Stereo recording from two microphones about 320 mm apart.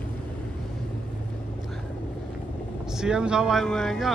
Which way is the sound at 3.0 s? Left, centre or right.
Centre.